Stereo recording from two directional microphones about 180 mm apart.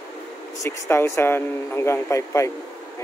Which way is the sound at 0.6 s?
15° left (ahead or behind).